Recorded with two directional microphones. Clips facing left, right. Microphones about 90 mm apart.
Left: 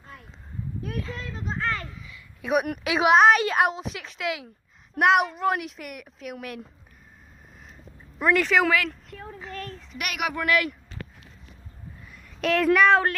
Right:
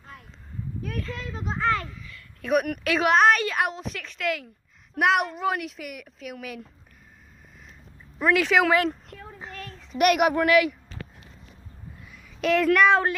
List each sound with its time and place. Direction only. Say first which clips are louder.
1.3 s a sound: right 4 dB; 10° right (ahead or behind)
2.0 s a sound: even; 15° left (ahead or behind)
2.8 s speech: left 3 dB; 10° left (ahead or behind)
3.4 s a woman's voice: left 4 dB; 25° left (ahead or behind)
3.7 s speech: left 1 dB; 15° left (ahead or behind)
8.2 s speech: even; 5° right (ahead or behind)
8.7 s speech: right 3 dB; 40° right (ahead or behind)
10.3 s speech: right 5 dB; 25° right (ahead or behind)
12.0 s a woman's voice: right 1 dB; centre (ahead or behind)